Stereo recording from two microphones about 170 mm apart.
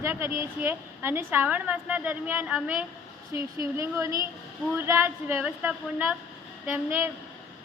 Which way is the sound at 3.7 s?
15° right (ahead or behind).